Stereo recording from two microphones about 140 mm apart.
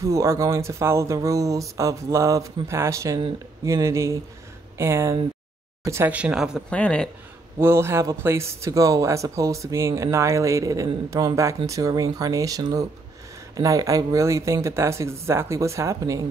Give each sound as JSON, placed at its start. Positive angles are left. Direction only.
{"t": 0.0, "sound": "speech", "side_deg": -20}
{"t": 6.7, "sound": "speech", "side_deg": 10}
{"t": 7.5, "sound": "speech", "side_deg": -20}